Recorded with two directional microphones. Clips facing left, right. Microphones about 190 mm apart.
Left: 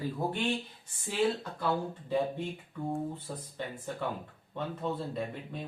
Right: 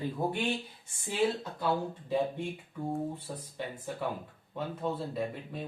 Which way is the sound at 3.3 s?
5° right (ahead or behind).